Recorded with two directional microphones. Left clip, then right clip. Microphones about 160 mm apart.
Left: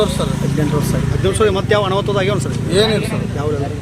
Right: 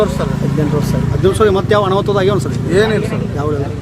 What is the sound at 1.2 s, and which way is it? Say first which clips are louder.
Speech: right 4 dB; 55° right (ahead or behind).